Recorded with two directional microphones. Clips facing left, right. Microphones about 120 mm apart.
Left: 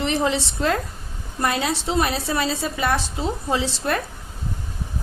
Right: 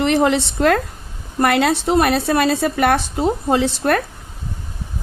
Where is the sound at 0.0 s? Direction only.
60° right (ahead or behind).